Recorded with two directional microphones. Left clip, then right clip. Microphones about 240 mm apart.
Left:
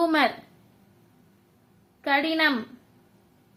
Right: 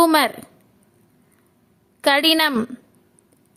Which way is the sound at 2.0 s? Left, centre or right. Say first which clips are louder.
Right 7 dB; right.